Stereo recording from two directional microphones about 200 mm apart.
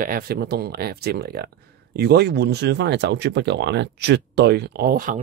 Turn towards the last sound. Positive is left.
turn(degrees=-45)  # may be behind; listen again after turning